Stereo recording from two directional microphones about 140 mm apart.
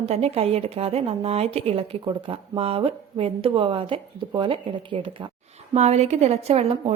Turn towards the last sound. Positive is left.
turn(degrees=-45)  # may be behind; listen again after turning